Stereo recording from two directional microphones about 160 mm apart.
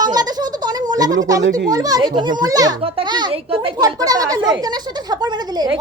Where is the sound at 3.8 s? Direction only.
25° right (ahead or behind).